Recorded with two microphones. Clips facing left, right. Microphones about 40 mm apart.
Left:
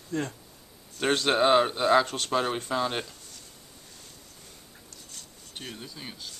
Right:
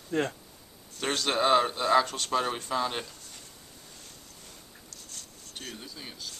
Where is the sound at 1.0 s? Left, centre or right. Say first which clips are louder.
Left 4 dB; centre.